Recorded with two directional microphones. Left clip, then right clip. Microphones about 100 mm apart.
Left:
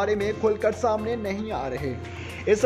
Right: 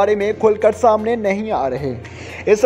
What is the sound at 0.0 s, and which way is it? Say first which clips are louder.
Speech: right 9 dB; 50° right (ahead or behind).